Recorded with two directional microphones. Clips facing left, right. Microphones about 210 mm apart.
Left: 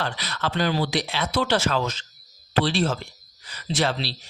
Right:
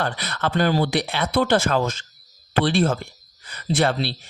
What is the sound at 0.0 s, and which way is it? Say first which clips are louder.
Speech: right 3 dB; 55° right (ahead or behind).